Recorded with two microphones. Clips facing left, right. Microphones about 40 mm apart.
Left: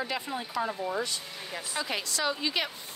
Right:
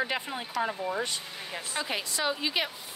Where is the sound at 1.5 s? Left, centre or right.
Centre.